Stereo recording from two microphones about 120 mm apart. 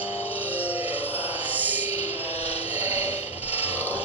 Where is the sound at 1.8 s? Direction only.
55° left (ahead or behind).